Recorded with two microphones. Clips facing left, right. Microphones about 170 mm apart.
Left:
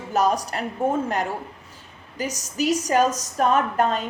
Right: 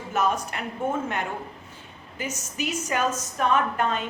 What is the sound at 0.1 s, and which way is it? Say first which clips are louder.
A woman's voice: left 4 dB; 35° left (ahead or behind).